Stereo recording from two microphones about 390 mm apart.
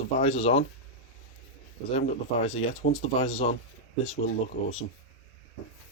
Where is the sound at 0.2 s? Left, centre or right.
Centre.